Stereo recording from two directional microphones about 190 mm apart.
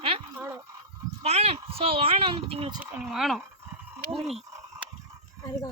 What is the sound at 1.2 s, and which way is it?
Speech, 35° right (ahead or behind).